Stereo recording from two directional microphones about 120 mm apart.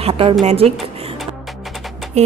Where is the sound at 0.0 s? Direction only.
50° right (ahead or behind).